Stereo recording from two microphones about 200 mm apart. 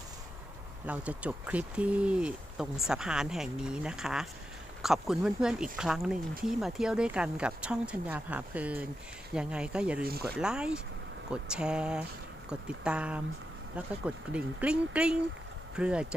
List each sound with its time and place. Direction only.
0.9 s speech: 5° right (ahead or behind)
10.0 s speech: 50° right (ahead or behind)
10.4 s speech: 5° right (ahead or behind)
14.3 s speech: 5° right (ahead or behind)